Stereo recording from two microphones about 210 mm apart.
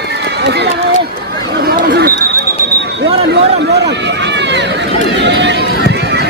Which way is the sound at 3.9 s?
55° right (ahead or behind).